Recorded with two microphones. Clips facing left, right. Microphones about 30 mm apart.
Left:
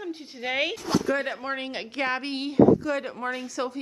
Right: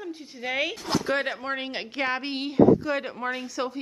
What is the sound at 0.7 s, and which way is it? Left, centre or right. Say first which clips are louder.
Speech: left 2 dB; right.